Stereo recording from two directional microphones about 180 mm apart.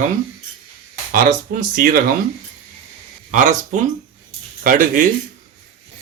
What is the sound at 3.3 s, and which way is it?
Speech, 45° right (ahead or behind).